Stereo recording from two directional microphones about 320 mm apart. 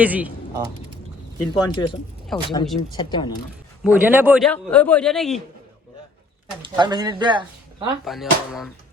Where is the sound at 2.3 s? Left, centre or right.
Centre.